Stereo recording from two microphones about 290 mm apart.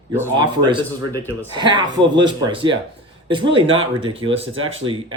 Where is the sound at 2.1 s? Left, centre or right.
Centre.